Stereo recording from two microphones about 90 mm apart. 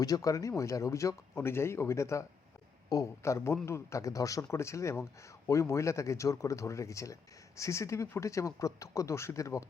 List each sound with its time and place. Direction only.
0.0 s speech: 40° left (ahead or behind)